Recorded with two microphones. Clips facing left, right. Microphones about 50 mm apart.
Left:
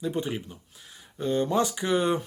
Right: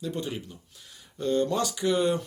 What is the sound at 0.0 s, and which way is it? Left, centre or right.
Speech, centre.